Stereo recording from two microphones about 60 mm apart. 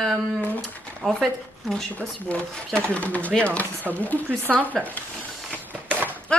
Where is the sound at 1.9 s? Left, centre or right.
Left.